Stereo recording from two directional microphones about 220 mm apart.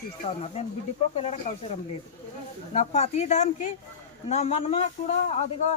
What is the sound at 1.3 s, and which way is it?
Speech, 30° left (ahead or behind).